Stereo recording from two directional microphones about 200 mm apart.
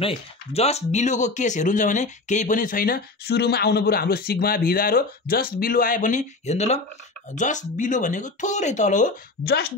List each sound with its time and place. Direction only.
0.0 s speech: 30° left (ahead or behind); by 9.7 s 50° left (ahead or behind)